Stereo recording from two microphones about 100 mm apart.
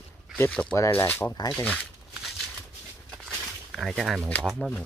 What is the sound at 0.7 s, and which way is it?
Speech, 30° left (ahead or behind).